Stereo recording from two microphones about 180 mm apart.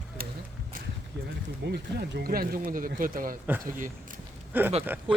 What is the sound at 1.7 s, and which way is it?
Speech, 60° right (ahead or behind).